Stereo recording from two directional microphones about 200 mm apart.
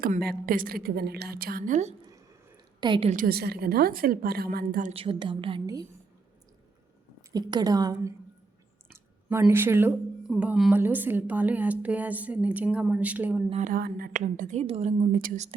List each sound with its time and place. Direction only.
0.0 s a woman's voice: 50° right (ahead or behind)
2.8 s a woman's voice: 25° right (ahead or behind)
3.1 s a woman's voice: 45° right (ahead or behind); by 5.8 s 20° right (ahead or behind)
7.2 s a woman's voice: 20° right (ahead or behind)
13.5 s a woman's voice: 40° right (ahead or behind)
15.1 s a woman's voice: 45° right (ahead or behind)